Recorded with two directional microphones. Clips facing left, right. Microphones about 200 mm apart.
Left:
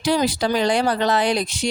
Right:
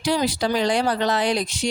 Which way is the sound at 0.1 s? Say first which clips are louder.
Left 2 dB; 55° left (ahead or behind).